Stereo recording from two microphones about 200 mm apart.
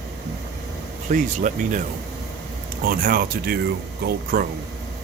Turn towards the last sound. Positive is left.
turn(degrees=-45)  # may be behind; listen again after turning